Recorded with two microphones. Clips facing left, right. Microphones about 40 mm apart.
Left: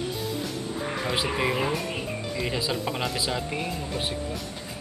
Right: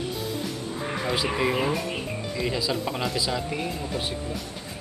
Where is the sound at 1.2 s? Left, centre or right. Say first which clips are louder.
Right 2 dB; centre.